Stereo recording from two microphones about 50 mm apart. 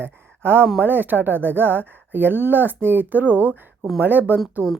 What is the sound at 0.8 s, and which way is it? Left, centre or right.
Speech, right.